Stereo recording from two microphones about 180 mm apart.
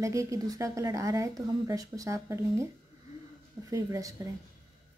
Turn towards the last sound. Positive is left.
turn(degrees=-15)  # may be behind; listen again after turning